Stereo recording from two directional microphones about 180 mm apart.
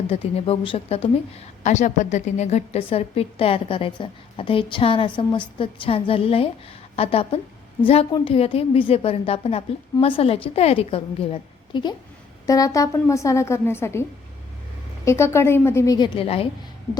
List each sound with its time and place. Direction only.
0.1 s a woman's voice: 35° left (ahead or behind)
1.6 s a woman's voice: 40° left (ahead or behind); by 14.0 s 15° left (ahead or behind)
15.0 s a woman's voice: 15° left (ahead or behind); by 16.5 s 30° left (ahead or behind)